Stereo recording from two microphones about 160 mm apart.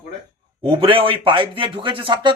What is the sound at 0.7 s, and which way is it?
Speech, 35° right (ahead or behind).